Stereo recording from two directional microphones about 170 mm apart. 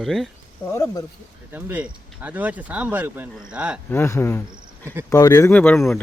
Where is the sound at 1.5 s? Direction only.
10° right (ahead or behind).